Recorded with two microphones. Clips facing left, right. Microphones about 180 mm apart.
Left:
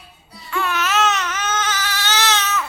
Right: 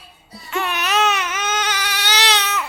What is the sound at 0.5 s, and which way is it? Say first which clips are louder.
Baby cry: even; 15° right (ahead or behind).